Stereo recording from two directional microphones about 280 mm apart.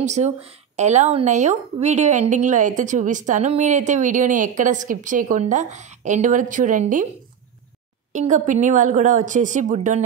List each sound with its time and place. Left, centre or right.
0.0 s a woman's voice: right
8.1 s a woman's voice: right